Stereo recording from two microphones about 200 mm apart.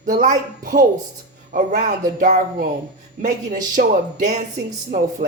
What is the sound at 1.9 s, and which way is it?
A woman's voice, 45° right (ahead or behind).